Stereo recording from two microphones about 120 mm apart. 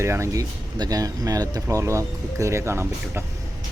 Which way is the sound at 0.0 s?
25° right (ahead or behind).